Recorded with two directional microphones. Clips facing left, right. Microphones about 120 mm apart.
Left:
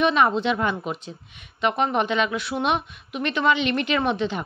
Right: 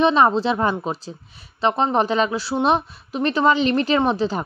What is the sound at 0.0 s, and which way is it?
A woman's voice, 30° right (ahead or behind).